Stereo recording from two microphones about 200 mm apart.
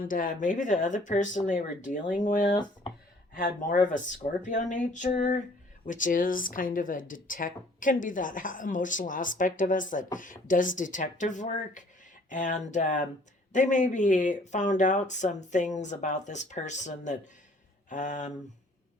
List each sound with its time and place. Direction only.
0.0 s speech: 40° left (ahead or behind)